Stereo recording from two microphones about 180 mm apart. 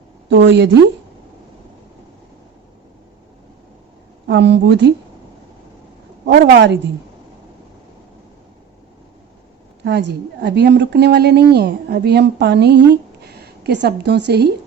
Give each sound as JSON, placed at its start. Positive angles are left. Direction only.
{"t": 0.3, "sound": "speech", "side_deg": -85}
{"t": 4.3, "sound": "speech", "side_deg": -75}
{"t": 6.4, "sound": "speech", "side_deg": -70}
{"t": 9.8, "sound": "speech", "side_deg": -70}